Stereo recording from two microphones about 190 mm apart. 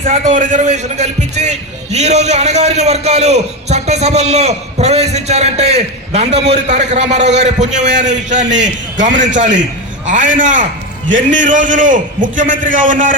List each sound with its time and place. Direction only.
0.1 s a man's voice: 40° right (ahead or behind)